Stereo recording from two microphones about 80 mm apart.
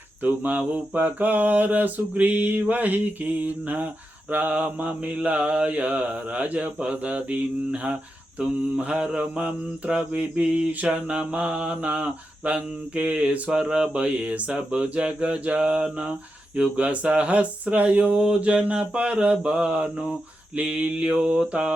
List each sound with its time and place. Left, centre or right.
0.2 s mantra: right